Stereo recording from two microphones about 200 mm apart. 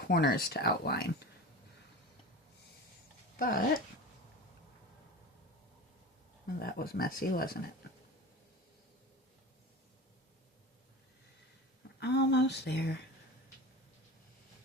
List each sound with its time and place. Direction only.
0.1 s speech: 50° left (ahead or behind)
3.3 s speech: 45° left (ahead or behind)
6.6 s speech: 50° left (ahead or behind)
11.9 s speech: 60° left (ahead or behind)